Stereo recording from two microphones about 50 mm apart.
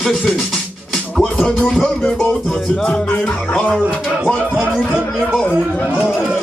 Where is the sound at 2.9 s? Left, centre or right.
Left.